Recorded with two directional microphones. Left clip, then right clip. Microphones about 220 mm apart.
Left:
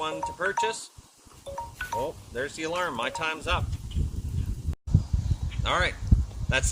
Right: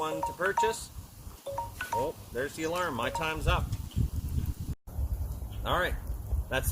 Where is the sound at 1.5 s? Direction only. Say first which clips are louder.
Right 1 dB; 10° right (ahead or behind).